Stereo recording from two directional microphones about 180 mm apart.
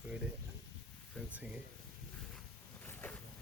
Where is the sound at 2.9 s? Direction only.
10° left (ahead or behind).